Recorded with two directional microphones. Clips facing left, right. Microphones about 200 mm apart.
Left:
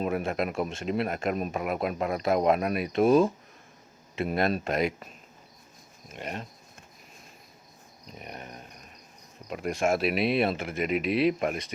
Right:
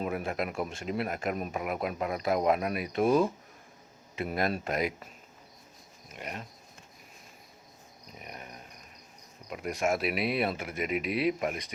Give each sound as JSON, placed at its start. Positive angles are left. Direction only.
{"t": 0.0, "sound": "speech", "side_deg": 25}
{"t": 6.1, "sound": "dog", "side_deg": 30}
{"t": 8.2, "sound": "dog", "side_deg": 30}
{"t": 9.5, "sound": "speech", "side_deg": 30}